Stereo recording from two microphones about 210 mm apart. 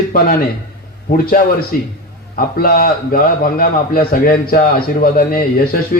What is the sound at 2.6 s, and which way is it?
A man's voice, 45° left (ahead or behind).